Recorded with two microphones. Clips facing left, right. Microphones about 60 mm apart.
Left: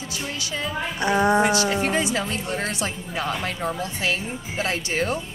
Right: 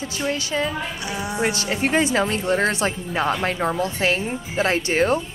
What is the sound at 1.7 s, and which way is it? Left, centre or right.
Speech, right.